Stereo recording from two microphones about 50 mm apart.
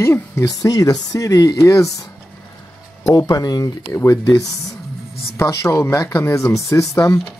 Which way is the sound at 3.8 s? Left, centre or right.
Left.